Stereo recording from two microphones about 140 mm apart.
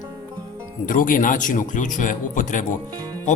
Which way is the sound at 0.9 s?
70° left (ahead or behind).